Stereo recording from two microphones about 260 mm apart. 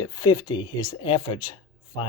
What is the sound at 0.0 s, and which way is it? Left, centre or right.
Speech, centre.